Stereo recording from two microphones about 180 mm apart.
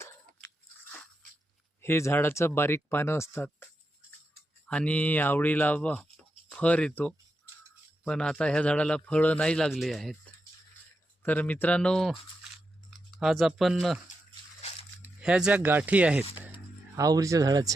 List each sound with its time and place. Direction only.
1.8 s speech: 15° left (ahead or behind)
4.7 s speech: 5° left (ahead or behind)
11.2 s speech: 10° left (ahead or behind)
13.1 s speech: centre (ahead or behind)
14.6 s a sound: 35° left (ahead or behind)
15.2 s speech: 5° right (ahead or behind)
16.9 s speech: 20° right (ahead or behind)